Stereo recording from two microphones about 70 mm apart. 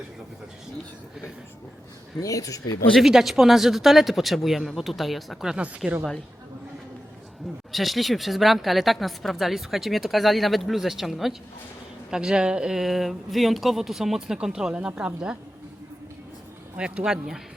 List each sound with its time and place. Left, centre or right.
2.2 s speech: left
2.9 s speech: centre
7.7 s speech: centre
16.7 s speech: centre